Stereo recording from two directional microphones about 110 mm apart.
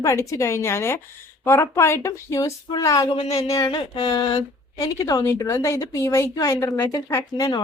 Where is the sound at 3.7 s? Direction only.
45° left (ahead or behind).